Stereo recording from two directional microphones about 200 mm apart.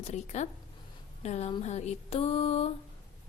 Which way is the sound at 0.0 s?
35° left (ahead or behind).